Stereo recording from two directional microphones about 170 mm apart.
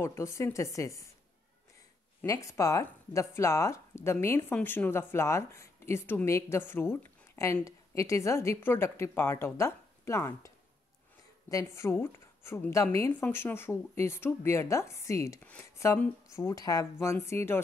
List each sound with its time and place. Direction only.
0.0 s speech: 15° left (ahead or behind)
2.2 s speech: 20° left (ahead or behind)